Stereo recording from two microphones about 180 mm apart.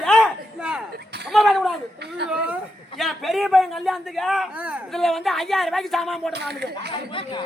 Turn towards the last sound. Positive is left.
turn(degrees=30)  # may be behind; listen again after turning